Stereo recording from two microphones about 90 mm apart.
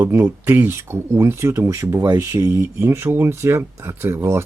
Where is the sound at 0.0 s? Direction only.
20° right (ahead or behind).